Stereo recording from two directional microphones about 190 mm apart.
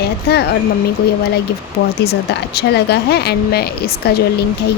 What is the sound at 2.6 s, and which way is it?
A woman's voice, 60° left (ahead or behind).